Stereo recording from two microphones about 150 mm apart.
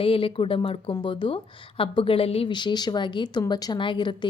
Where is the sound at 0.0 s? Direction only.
40° left (ahead or behind).